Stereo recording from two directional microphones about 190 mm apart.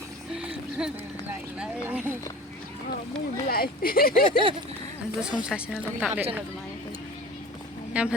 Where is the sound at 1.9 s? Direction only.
10° right (ahead or behind).